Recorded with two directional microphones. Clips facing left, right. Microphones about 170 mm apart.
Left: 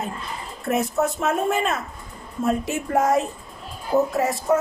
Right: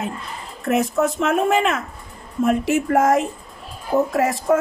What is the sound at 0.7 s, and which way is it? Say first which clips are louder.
Speech: right 3 dB; 90° right.